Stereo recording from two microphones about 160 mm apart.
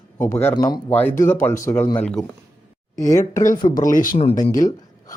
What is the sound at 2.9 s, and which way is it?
Speech, 20° left (ahead or behind).